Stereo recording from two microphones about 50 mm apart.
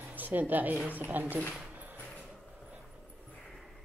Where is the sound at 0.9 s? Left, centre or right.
Right.